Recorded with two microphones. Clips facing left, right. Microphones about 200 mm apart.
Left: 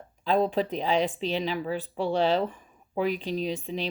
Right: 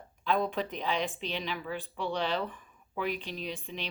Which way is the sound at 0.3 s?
35° left (ahead or behind).